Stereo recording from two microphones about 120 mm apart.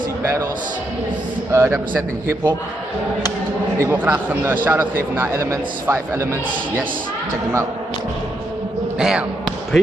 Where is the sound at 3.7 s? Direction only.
25° right (ahead or behind).